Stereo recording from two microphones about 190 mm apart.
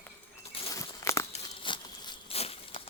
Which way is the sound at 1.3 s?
25° left (ahead or behind).